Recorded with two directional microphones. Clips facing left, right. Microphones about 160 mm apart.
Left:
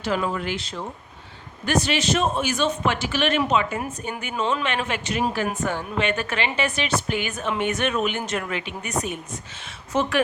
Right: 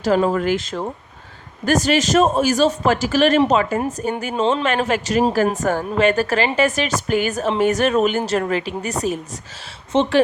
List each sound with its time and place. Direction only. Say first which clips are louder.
0.0 s a woman's voice: right 8 dB; 40° right (ahead or behind)